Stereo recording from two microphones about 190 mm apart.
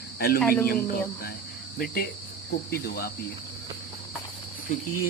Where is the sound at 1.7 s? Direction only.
55° left (ahead or behind).